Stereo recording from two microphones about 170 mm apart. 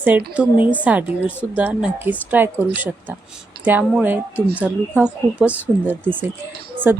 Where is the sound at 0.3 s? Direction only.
10° right (ahead or behind).